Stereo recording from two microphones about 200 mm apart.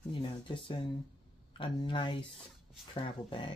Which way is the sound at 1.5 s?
25° left (ahead or behind).